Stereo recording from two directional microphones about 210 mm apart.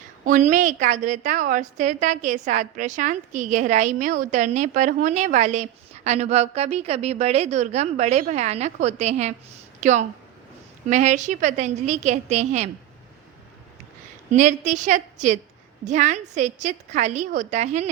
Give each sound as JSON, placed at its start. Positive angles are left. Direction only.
{"t": 0.3, "sound": "a woman's voice", "side_deg": -35}
{"t": 14.3, "sound": "a woman's voice", "side_deg": -35}